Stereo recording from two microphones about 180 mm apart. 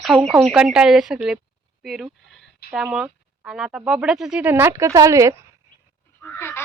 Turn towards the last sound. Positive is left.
turn(degrees=15)  # may be behind; listen again after turning